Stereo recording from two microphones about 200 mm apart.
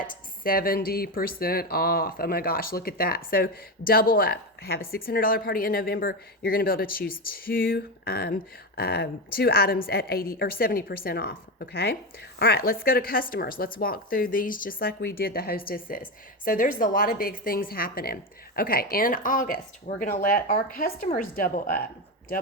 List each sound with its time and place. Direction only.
0.0 s speech: 45° left (ahead or behind)